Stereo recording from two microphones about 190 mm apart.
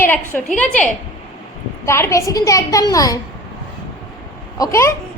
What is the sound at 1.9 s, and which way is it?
A woman's voice, 15° left (ahead or behind).